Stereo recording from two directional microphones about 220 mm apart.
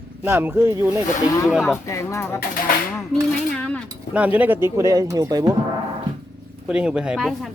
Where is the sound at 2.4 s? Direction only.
40° left (ahead or behind).